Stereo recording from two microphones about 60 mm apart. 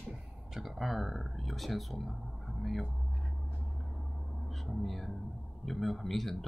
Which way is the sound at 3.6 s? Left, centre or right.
Centre.